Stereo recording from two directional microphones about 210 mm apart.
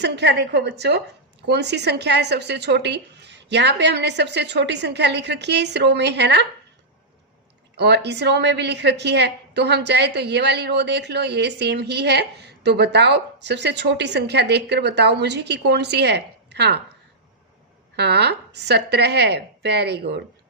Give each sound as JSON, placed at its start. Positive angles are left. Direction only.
{"t": 0.0, "sound": "a woman's voice", "side_deg": -55}
{"t": 7.8, "sound": "a woman's voice", "side_deg": -55}
{"t": 17.9, "sound": "a woman's voice", "side_deg": -50}